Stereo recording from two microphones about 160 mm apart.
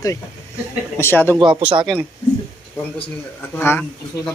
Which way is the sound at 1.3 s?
30° right (ahead or behind).